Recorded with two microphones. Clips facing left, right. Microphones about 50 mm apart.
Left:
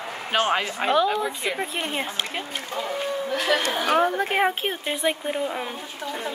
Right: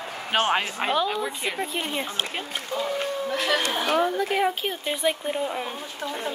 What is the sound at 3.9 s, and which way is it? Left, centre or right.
Speech, left.